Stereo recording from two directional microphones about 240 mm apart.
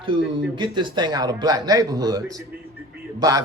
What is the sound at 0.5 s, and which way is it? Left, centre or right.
A man's voice, centre.